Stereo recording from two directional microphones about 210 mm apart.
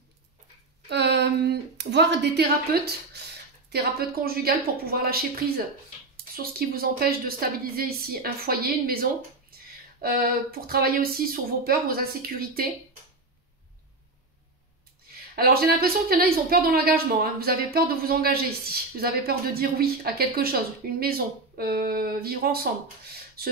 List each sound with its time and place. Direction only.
0.8 s speech: 55° right (ahead or behind)
6.3 s speech: 45° right (ahead or behind)
9.5 s a sound: 45° right (ahead or behind)
10.0 s speech: 45° right (ahead or behind)
15.3 s speech: 45° right (ahead or behind)